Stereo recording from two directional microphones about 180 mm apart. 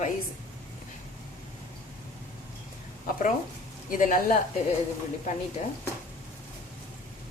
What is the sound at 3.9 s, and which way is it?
Speech, 50° left (ahead or behind).